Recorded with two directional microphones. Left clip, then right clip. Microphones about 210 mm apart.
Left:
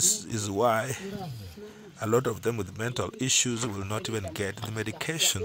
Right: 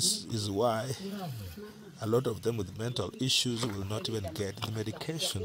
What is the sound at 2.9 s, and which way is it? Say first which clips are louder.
Speech: left 2 dB; 20° left (ahead or behind).